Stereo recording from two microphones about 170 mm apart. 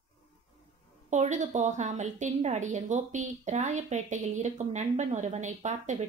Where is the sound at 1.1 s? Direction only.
45° right (ahead or behind).